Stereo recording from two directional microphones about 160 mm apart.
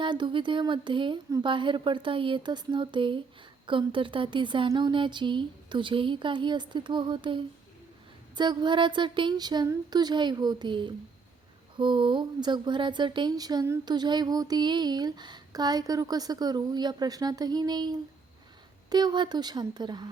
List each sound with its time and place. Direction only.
0.0 s speech: 30° right (ahead or behind)